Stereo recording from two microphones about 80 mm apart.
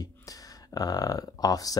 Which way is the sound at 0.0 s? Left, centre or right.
Left.